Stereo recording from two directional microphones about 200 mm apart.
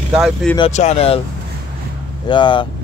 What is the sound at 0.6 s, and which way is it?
Speech, 35° left (ahead or behind).